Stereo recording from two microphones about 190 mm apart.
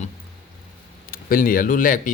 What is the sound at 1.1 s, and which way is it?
Speech, 50° left (ahead or behind).